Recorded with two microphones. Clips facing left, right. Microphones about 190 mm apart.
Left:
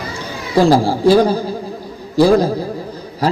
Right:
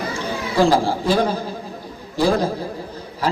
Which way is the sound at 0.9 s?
35° left (ahead or behind).